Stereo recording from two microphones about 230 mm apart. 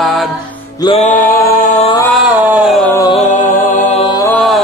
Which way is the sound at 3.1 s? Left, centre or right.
Left.